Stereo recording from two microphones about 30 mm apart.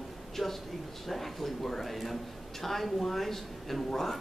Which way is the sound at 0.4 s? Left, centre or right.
Centre.